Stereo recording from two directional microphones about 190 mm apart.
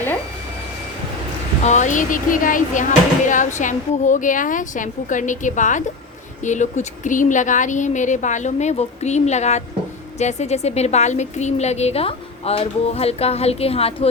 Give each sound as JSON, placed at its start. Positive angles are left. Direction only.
{"t": 1.6, "sound": "a woman's voice", "side_deg": 40}